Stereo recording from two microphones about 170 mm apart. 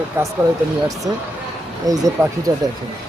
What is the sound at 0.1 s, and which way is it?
Speech, 15° right (ahead or behind).